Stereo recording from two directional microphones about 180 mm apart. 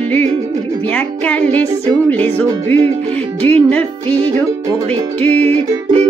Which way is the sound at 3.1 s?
10° left (ahead or behind).